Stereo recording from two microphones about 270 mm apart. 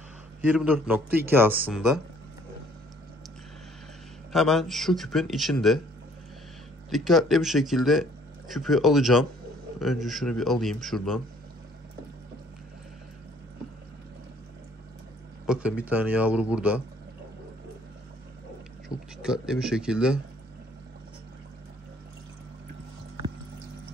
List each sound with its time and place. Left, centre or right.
0.5 s speech: centre
4.3 s speech: centre
6.9 s speech: centre
15.4 s speech: centre
18.9 s speech: centre
19.2 s speech: centre